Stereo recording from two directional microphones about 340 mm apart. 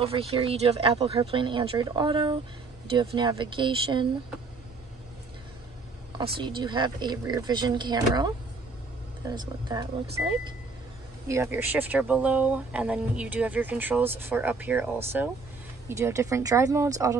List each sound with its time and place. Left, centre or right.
0.0 s speech: centre
6.1 s speech: centre
9.3 s speech: centre
11.2 s speech: centre